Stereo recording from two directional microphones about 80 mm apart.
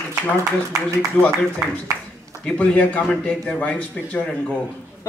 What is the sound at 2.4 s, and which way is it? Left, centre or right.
A man's voice, centre.